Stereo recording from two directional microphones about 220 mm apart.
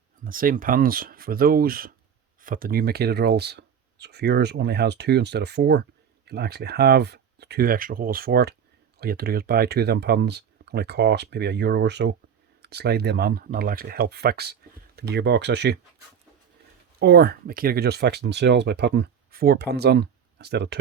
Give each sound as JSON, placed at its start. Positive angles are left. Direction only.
{"t": 0.3, "sound": "speech", "side_deg": -40}
{"t": 17.0, "sound": "speech", "side_deg": -45}